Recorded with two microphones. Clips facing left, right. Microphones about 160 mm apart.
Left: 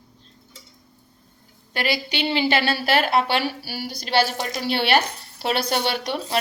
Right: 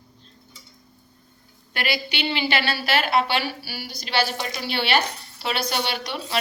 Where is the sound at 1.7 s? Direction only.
40° left (ahead or behind).